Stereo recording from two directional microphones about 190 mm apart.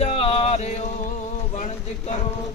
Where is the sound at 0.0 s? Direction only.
30° left (ahead or behind).